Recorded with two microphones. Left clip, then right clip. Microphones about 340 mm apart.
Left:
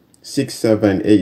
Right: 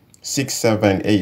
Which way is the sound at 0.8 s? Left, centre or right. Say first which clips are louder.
Left 4 dB; centre.